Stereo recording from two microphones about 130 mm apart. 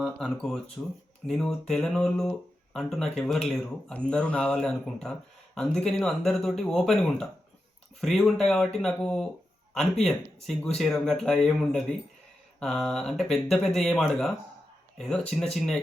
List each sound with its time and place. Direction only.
0.0 s speech: centre (ahead or behind)